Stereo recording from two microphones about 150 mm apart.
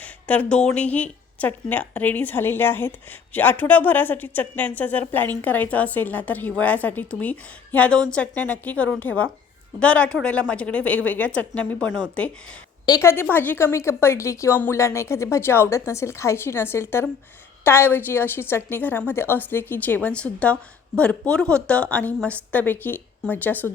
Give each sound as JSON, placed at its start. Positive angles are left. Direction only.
{"t": 0.0, "sound": "a woman's voice", "side_deg": 10}
{"t": 12.8, "sound": "a woman's voice", "side_deg": 20}